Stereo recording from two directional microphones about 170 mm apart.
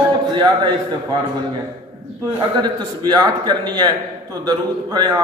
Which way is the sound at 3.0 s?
25° right (ahead or behind).